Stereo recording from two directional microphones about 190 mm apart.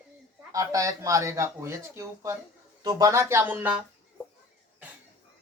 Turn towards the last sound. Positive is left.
turn(degrees=-10)  # may be behind; listen again after turning